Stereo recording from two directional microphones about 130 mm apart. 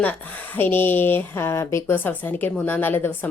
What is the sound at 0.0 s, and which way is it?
Speech, 15° left (ahead or behind).